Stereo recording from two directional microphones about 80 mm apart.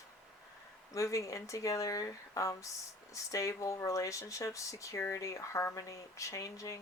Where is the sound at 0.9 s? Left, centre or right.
Left.